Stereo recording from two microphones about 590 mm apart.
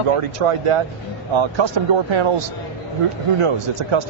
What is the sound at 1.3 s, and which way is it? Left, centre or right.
Speech, right.